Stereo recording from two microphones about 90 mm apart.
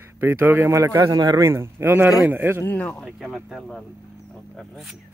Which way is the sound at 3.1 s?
5° right (ahead or behind).